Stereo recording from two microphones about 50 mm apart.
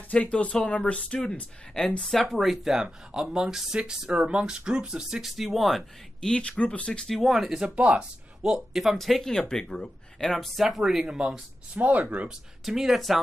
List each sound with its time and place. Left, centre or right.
0.1 s speech: left
2.0 s speech: centre
5.2 s speech: centre
6.2 s speech: centre
6.9 s speech: centre
7.2 s speech: centre
7.7 s speech: right
8.5 s speech: centre
10.6 s speech: centre
11.7 s speech: right
12.3 s speech: centre